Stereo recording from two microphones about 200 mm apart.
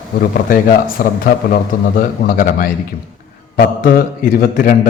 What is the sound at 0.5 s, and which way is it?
A man's voice, 45° left (ahead or behind).